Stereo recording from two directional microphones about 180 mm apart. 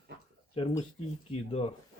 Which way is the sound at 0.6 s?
30° left (ahead or behind).